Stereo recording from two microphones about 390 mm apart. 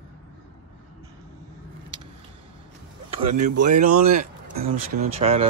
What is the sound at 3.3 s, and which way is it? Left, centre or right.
Speech, centre.